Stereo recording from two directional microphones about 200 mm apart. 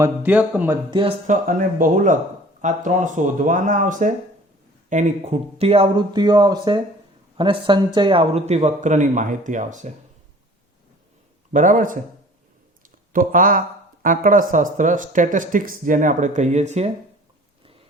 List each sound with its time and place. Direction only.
0.0 s speech: 10° right (ahead or behind)
0.9 s speech: 25° right (ahead or behind)
1.3 s speech: 45° right (ahead or behind)
11.5 s speech: 40° right (ahead or behind)